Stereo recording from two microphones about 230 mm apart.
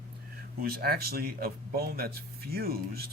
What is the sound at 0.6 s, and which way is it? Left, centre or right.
Speech, right.